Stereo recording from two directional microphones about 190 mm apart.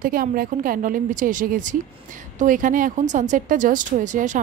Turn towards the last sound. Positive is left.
turn(degrees=-40)  # may be behind; listen again after turning